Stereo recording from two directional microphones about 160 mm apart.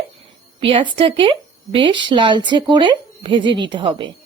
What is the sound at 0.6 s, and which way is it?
A woman's voice, 35° right (ahead or behind).